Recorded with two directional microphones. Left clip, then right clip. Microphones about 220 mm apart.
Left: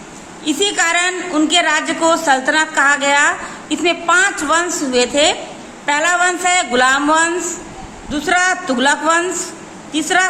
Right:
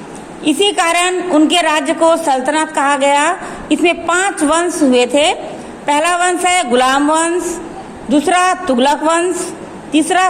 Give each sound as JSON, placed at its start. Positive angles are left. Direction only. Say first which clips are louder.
{"t": 0.4, "sound": "a woman's voice", "louder": "right 3 dB", "side_deg": -25}